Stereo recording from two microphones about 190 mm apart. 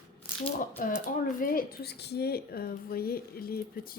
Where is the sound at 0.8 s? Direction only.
45° left (ahead or behind).